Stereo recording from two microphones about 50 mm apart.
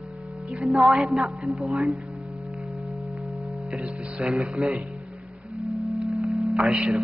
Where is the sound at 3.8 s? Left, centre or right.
Right.